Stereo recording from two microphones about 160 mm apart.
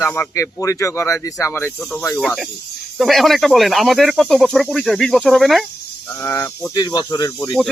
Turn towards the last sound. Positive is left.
turn(degrees=20)  # may be behind; listen again after turning